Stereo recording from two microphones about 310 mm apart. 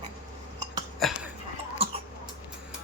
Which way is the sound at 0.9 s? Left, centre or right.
Centre.